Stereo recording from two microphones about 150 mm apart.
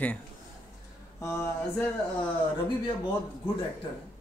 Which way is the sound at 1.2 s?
15° left (ahead or behind).